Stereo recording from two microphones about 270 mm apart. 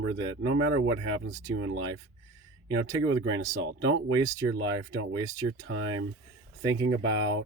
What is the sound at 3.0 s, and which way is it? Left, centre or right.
Speech, right.